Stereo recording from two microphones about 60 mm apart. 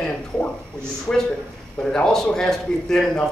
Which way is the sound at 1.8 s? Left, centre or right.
Centre.